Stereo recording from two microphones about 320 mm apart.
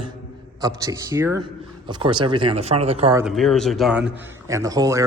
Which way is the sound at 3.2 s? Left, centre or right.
Centre.